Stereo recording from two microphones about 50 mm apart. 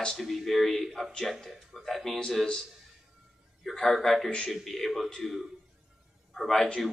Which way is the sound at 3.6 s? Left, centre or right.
Centre.